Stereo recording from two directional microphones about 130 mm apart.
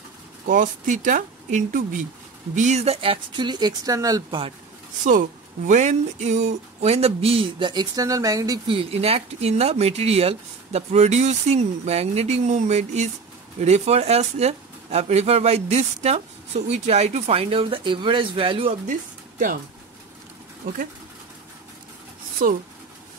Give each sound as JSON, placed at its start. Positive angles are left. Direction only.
{"t": 0.5, "sound": "speech", "side_deg": -80}
{"t": 2.5, "sound": "speech", "side_deg": -65}
{"t": 5.7, "sound": "speech", "side_deg": -65}
{"t": 8.6, "sound": "speech", "side_deg": -45}
{"t": 18.9, "sound": "speech", "side_deg": -85}
{"t": 22.4, "sound": "speech", "side_deg": -75}